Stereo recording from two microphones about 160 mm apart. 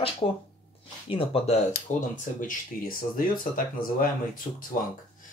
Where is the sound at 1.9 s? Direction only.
50° left (ahead or behind).